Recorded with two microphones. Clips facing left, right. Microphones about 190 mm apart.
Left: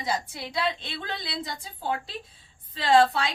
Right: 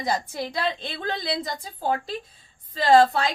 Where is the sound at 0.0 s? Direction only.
45° right (ahead or behind).